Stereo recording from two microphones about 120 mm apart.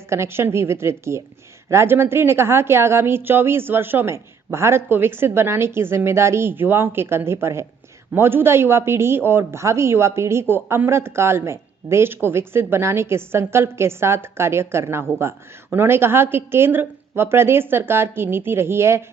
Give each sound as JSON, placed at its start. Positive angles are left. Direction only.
{"t": 0.1, "sound": "speech", "side_deg": -20}